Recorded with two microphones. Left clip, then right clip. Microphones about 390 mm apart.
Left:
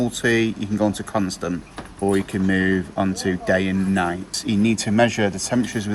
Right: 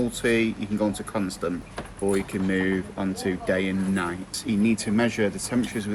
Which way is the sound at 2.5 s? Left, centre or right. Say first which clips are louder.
Left 5 dB; left.